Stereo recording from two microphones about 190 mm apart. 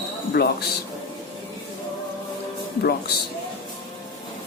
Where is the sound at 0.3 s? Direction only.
60° left (ahead or behind).